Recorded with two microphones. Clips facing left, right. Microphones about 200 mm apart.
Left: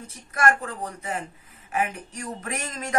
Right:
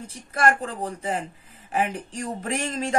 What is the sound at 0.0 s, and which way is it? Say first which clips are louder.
A woman's voice: right 1 dB; 30° right (ahead or behind).